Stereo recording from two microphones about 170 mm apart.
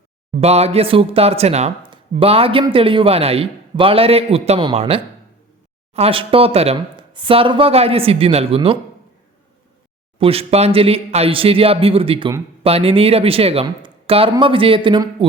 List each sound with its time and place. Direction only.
0.3 s speech: 40° right (ahead or behind)
10.2 s speech: 35° right (ahead or behind)